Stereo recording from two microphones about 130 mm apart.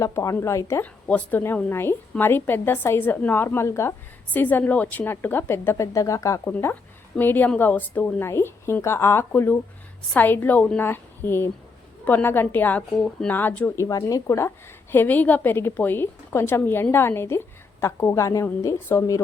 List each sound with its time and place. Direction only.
0.0 s a woman's voice: 25° left (ahead or behind)